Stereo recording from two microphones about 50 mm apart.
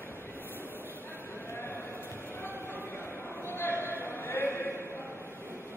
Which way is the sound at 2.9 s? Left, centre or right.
Left.